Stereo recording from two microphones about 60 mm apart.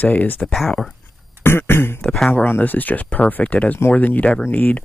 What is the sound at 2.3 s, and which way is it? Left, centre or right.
Speech, left.